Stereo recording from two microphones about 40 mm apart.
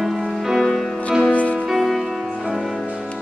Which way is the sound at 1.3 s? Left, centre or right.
Left.